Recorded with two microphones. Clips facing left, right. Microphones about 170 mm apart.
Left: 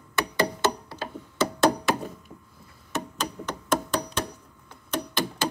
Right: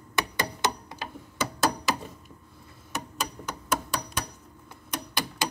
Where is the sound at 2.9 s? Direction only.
10° right (ahead or behind).